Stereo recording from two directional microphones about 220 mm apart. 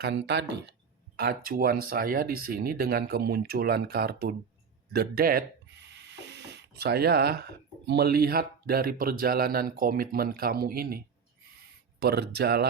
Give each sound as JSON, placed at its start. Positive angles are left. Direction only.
{"t": 0.0, "sound": "speech", "side_deg": -50}